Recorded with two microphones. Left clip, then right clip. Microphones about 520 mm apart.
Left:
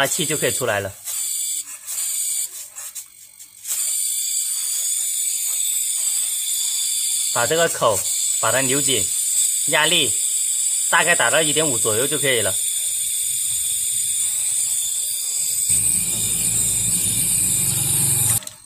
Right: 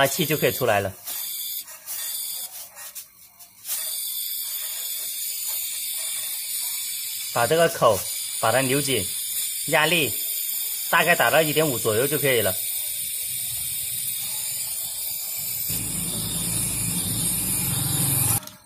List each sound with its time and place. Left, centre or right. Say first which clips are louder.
0.0 s speech: even; left
7.3 s speech: even; left